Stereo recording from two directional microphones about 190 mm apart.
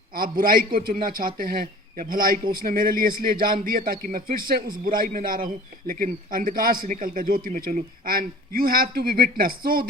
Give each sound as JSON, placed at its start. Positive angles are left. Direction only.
{"t": 0.1, "sound": "speech", "side_deg": -50}